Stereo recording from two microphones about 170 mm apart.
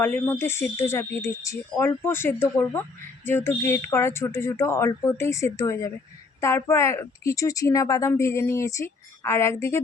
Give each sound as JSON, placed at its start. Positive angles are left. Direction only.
{"t": 0.0, "sound": "speech", "side_deg": 10}